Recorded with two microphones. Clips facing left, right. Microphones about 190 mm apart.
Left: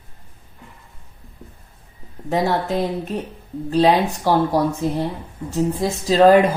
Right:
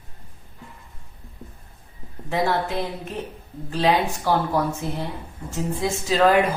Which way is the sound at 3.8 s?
35° left (ahead or behind).